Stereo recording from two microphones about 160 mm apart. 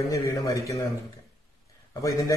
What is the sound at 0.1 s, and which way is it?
Speech, 20° left (ahead or behind).